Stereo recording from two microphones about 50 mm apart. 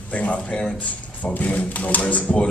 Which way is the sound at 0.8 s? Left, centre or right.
Left.